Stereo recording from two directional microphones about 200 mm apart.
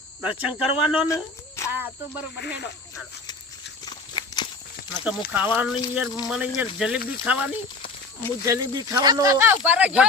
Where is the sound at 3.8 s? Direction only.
20° left (ahead or behind).